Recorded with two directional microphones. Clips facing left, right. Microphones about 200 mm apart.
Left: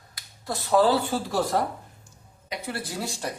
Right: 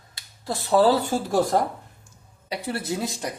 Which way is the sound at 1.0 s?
45° right (ahead or behind).